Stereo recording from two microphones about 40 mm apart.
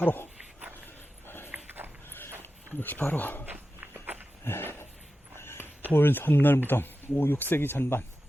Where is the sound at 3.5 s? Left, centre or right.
Right.